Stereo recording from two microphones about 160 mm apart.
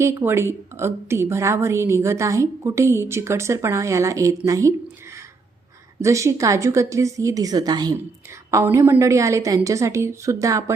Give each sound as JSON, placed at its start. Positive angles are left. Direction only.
{"t": 0.0, "sound": "a woman's voice", "side_deg": -15}
{"t": 6.0, "sound": "a woman's voice", "side_deg": -20}